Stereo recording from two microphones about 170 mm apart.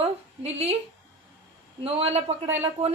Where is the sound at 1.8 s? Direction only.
35° right (ahead or behind).